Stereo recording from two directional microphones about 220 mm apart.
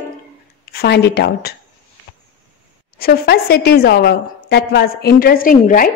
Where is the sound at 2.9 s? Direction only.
45° left (ahead or behind).